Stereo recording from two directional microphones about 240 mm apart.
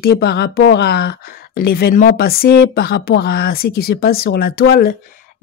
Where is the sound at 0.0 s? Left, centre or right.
Left.